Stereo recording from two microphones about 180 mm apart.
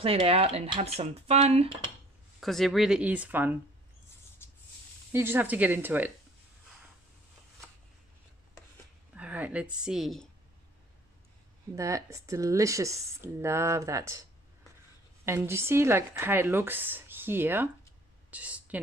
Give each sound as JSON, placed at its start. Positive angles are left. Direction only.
{"t": 0.0, "sound": "speech", "side_deg": -30}
{"t": 2.4, "sound": "speech", "side_deg": 0}
{"t": 4.4, "sound": "a sound", "side_deg": 15}
{"t": 5.1, "sound": "speech", "side_deg": -10}
{"t": 9.1, "sound": "a sound", "side_deg": -10}
{"t": 9.8, "sound": "speech", "side_deg": 0}
{"t": 11.7, "sound": "speech", "side_deg": -15}
{"t": 15.2, "sound": "speech", "side_deg": -15}